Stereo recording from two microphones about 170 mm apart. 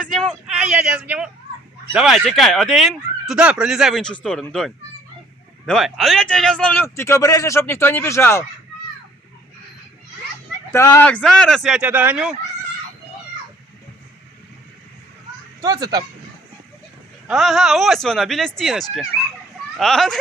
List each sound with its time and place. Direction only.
0.0 s a man's voice: 5° left (ahead or behind)
10.7 s speech: 15° left (ahead or behind); by 12.3 s 5° right (ahead or behind)
15.6 s speech: 25° right (ahead or behind)
17.2 s speech: centre (ahead or behind)